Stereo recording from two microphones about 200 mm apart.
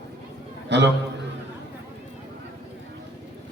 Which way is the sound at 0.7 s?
60° right (ahead or behind).